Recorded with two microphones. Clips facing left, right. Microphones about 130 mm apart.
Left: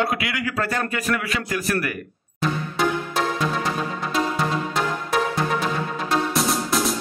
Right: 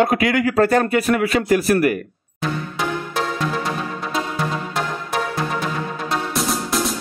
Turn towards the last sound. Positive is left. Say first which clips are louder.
# even
turn(degrees=0)  # may be behind; listen again after turning